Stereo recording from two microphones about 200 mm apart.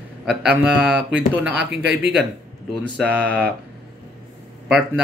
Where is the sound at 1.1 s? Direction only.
65° right (ahead or behind).